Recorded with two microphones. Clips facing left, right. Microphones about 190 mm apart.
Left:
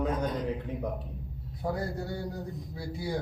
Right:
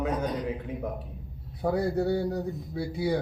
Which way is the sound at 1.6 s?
70° right (ahead or behind).